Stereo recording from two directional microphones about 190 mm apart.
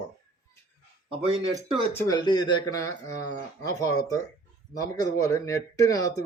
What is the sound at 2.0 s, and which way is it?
A man's voice, 20° left (ahead or behind).